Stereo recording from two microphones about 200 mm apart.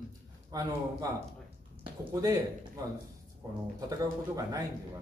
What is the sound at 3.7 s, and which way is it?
Speech, 20° right (ahead or behind).